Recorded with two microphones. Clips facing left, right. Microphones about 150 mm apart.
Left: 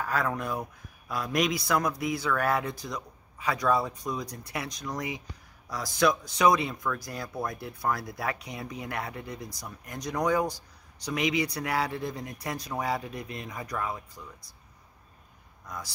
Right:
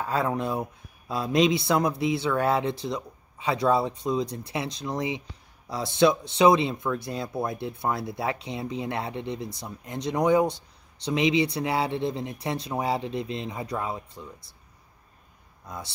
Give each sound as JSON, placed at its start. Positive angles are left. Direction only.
{"t": 0.0, "sound": "speech", "side_deg": -25}
{"t": 15.6, "sound": "speech", "side_deg": -25}